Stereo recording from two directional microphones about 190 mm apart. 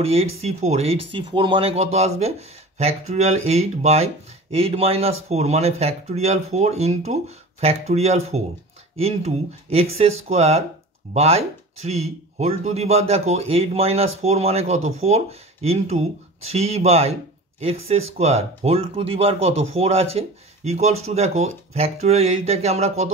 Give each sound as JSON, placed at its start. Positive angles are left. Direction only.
{"t": 0.0, "sound": "speech", "side_deg": -30}